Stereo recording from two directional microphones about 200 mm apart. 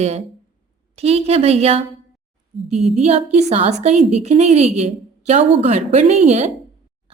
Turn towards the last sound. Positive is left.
turn(degrees=-35)  # may be behind; listen again after turning